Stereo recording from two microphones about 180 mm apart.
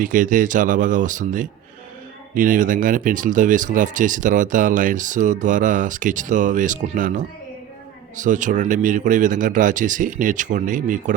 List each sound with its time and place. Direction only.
0.0 s speech: 50° right (ahead or behind)